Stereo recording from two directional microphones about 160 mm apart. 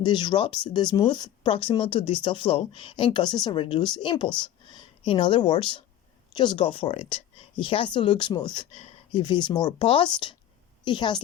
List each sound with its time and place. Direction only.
0.0 s a woman's voice: 30° left (ahead or behind)